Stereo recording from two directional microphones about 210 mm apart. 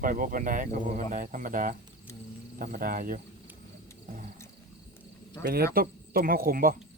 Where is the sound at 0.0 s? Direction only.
40° right (ahead or behind).